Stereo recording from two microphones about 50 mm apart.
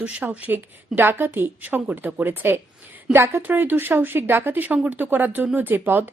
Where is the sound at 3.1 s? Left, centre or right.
Right.